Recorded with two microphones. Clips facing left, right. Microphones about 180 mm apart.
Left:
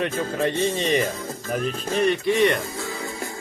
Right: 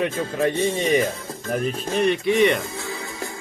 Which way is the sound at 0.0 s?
10° right (ahead or behind).